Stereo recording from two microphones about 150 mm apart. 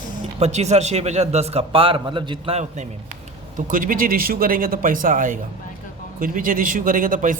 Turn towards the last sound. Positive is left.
turn(degrees=-65)  # may be behind; listen again after turning